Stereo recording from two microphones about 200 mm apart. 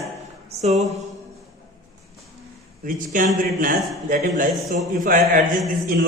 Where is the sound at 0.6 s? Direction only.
35° right (ahead or behind).